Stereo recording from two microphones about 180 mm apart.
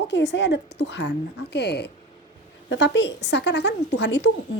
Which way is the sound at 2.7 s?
80° left.